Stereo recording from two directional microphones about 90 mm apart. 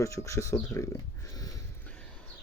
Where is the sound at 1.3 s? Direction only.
40° left (ahead or behind).